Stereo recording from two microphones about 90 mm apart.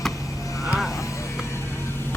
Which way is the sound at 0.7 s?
Centre (ahead or behind).